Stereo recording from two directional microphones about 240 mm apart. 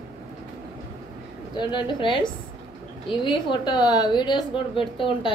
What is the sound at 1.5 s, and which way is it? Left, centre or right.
A woman's voice, centre.